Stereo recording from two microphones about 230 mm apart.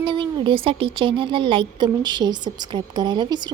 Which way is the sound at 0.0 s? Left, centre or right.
Right.